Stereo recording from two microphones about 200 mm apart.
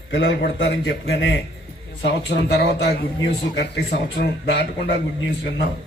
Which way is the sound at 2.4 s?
60° left (ahead or behind).